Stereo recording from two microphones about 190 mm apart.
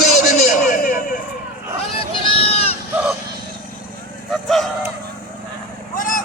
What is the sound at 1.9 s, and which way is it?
Sheep, 30° left (ahead or behind).